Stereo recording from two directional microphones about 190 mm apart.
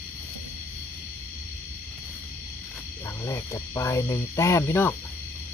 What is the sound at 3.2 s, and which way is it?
Speech, 15° left (ahead or behind).